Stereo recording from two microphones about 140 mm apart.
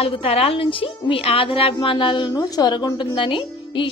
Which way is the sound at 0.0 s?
45° left (ahead or behind).